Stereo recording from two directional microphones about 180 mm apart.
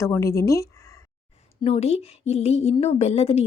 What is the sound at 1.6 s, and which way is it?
A woman's voice, 35° left (ahead or behind).